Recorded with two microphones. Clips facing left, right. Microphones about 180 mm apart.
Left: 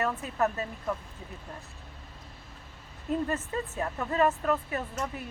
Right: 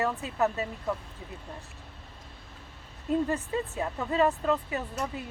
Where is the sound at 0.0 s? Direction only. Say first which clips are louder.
Right 1 dB; 20° right (ahead or behind).